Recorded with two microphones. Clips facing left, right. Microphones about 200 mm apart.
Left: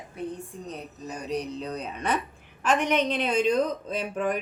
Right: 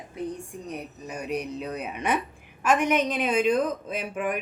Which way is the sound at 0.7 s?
10° right (ahead or behind).